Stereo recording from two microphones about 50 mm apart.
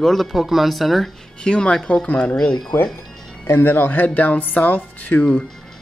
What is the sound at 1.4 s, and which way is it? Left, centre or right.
Speech, centre.